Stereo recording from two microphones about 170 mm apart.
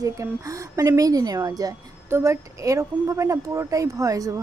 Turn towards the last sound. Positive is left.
turn(degrees=-20)  # may be behind; listen again after turning